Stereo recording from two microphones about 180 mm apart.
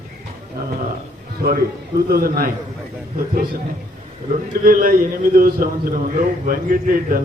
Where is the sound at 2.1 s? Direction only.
55° right (ahead or behind).